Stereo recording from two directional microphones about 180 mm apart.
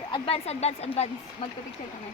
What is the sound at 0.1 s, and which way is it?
Speech, 35° left (ahead or behind).